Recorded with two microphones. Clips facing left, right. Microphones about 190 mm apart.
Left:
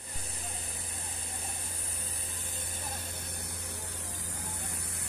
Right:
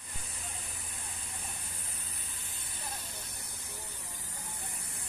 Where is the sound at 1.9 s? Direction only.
35° left (ahead or behind); by 4.5 s 90° left.